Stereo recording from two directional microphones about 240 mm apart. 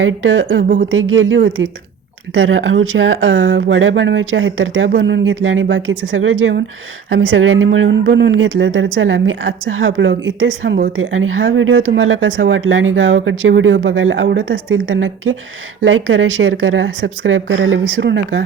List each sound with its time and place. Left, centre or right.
0.0 s a woman's voice: right